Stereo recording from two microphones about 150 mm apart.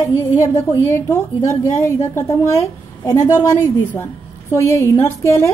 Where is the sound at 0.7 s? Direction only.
20° left (ahead or behind).